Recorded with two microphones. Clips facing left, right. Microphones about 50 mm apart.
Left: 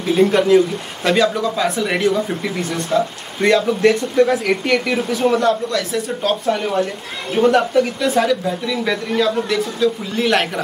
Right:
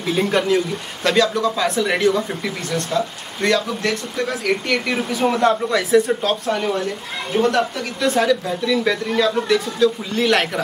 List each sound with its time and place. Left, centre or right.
0.2 s speech: centre
4.6 s speech: centre
5.4 s speech: centre
5.9 s speech: centre
7.4 s speech: centre